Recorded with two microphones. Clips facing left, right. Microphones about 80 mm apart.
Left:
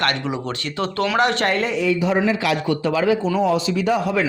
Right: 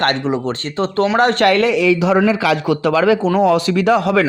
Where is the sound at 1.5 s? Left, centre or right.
Right.